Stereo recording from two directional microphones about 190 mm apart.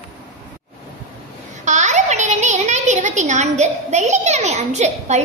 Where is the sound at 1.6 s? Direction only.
40° right (ahead or behind).